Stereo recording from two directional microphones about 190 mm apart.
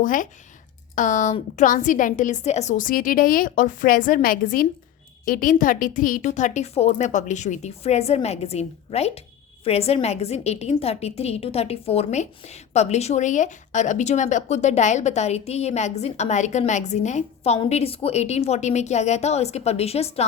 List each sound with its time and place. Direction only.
0.0 s a woman's voice: 45° left (ahead or behind)